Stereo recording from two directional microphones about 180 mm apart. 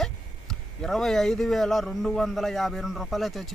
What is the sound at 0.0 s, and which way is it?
Speech, centre (ahead or behind).